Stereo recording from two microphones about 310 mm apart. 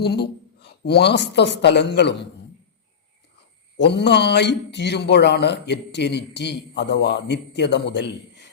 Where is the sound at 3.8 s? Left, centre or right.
Left.